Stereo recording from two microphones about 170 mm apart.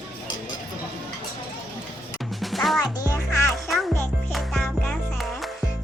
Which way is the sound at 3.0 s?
15° left (ahead or behind).